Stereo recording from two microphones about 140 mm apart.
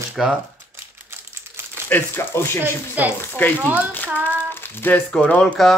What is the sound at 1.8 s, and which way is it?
Speech, 15° left (ahead or behind).